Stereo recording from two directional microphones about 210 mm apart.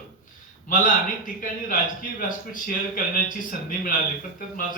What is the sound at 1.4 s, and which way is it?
A man's voice, 40° left (ahead or behind).